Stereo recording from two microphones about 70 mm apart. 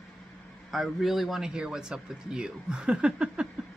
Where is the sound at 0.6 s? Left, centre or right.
Centre.